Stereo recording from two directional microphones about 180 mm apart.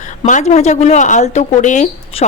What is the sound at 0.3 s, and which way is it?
A woman's voice, 40° left (ahead or behind).